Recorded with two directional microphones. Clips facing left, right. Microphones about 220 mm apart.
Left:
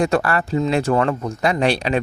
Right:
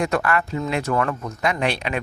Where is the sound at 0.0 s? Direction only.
35° left (ahead or behind).